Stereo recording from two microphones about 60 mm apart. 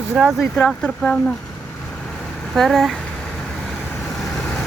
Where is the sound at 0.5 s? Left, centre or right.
Centre.